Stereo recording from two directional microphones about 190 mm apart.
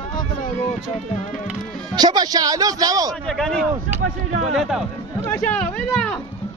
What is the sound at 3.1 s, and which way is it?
Speech, centre (ahead or behind).